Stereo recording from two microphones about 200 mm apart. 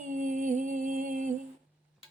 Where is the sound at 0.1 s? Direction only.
40° right (ahead or behind).